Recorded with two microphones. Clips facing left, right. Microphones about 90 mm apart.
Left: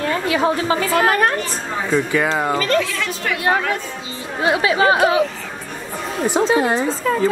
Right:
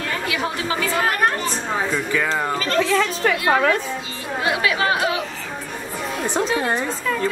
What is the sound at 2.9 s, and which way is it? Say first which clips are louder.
Speech: right 5 dB; 35° right (ahead or behind).